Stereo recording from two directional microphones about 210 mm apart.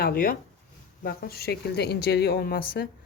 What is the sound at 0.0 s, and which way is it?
A woman's voice, 45° left (ahead or behind).